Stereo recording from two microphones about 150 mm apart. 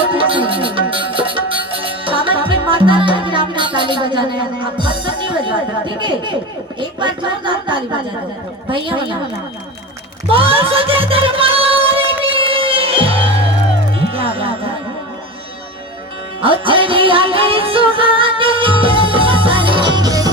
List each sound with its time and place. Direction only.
0.1 s music: 35° right (ahead or behind)
4.8 s speech: 35° right (ahead or behind)
10.2 s music: 40° right (ahead or behind)
16.4 s music: 35° right (ahead or behind)